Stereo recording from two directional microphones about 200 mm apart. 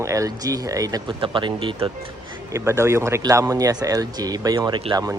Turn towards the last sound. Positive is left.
turn(degrees=-20)  # may be behind; listen again after turning